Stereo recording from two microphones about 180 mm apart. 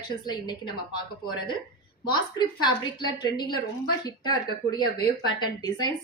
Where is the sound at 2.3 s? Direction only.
25° left (ahead or behind).